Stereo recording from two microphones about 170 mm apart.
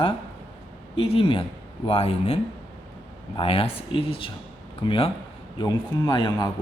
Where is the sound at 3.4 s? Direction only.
35° left (ahead or behind).